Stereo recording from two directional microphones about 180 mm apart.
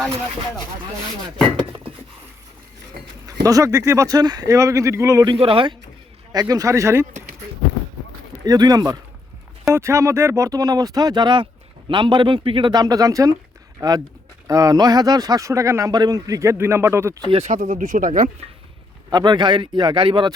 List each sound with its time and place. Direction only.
3.0 s a sound: 60° right (ahead or behind)
3.4 s speech: 20° right (ahead or behind)
6.3 s speech: 20° right (ahead or behind)
8.4 s speech: 20° right (ahead or behind)
17.2 s speech: 35° right (ahead or behind)
19.1 s speech: 25° right (ahead or behind)